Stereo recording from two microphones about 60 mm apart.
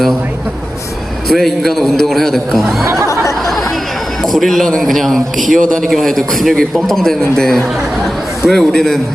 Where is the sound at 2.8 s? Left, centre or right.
Right.